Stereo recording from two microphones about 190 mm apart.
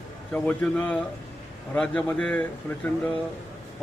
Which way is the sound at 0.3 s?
10° left (ahead or behind).